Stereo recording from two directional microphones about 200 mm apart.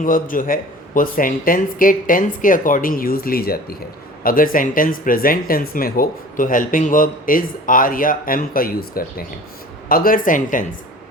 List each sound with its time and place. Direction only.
0.0 s speech: 45° left (ahead or behind)